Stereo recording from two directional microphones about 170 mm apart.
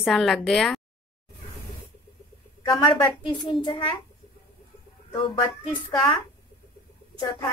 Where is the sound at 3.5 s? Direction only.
30° left (ahead or behind).